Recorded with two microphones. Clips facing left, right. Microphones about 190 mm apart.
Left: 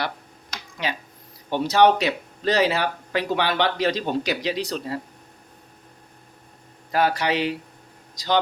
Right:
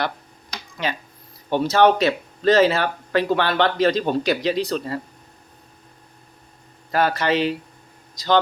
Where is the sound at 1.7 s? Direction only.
15° left (ahead or behind).